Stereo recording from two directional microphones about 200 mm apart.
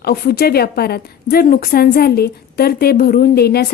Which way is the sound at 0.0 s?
50° left (ahead or behind).